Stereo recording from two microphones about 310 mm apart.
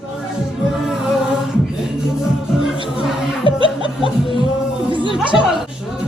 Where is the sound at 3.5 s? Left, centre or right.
Centre.